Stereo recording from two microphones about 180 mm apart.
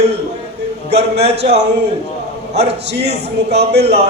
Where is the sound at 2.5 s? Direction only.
65° right (ahead or behind).